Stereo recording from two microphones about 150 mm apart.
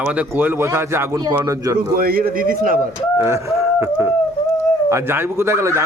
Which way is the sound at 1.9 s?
80° right.